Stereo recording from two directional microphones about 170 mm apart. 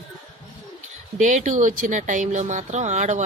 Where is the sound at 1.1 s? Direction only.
45° right (ahead or behind).